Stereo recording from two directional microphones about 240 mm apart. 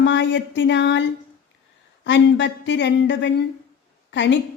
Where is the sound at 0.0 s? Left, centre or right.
Left.